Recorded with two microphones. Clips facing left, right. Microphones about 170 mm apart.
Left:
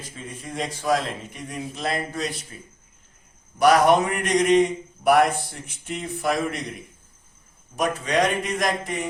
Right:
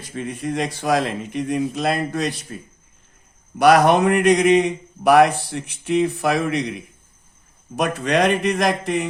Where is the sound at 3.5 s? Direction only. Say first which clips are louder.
Right 3 dB; 70° right (ahead or behind).